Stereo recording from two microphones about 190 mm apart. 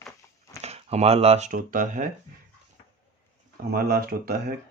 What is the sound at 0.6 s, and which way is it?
Speech, 35° right (ahead or behind).